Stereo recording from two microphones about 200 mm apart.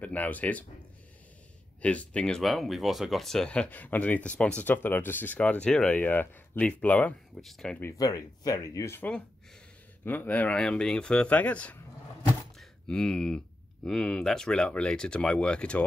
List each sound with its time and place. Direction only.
0.0 s speech: 10° left (ahead or behind)
1.8 s speech: 5° left (ahead or behind)
8.0 s speech: 20° left (ahead or behind)
12.5 s a sound: 5° left (ahead or behind)
13.8 s speech: 5° left (ahead or behind)